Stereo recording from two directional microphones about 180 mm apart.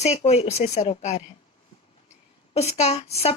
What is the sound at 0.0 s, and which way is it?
Speech, 40° left (ahead or behind).